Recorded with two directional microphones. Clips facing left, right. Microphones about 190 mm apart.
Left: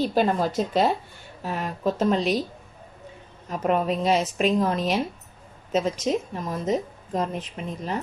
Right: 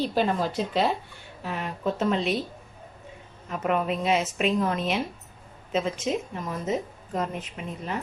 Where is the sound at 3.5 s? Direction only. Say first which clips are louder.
Left 3 dB; 35° left (ahead or behind).